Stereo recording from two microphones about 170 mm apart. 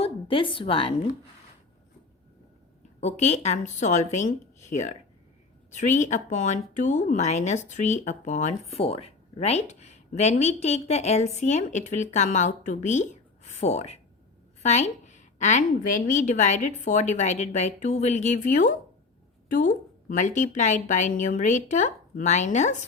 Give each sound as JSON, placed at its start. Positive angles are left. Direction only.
{"t": 0.0, "sound": "a woman's voice", "side_deg": 30}
{"t": 3.0, "sound": "a woman's voice", "side_deg": 40}